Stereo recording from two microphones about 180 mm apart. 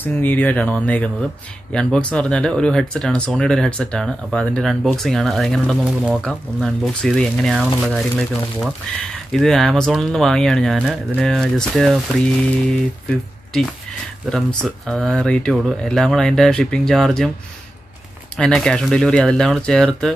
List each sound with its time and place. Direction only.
0.0 s speech: 10° left (ahead or behind)
9.3 s speech: centre (ahead or behind)
18.4 s speech: 5° left (ahead or behind)